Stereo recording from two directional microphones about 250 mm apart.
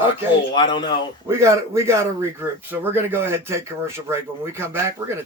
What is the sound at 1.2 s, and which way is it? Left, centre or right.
Speech, centre.